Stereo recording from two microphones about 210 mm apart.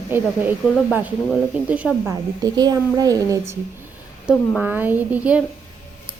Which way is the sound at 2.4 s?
20° right (ahead or behind).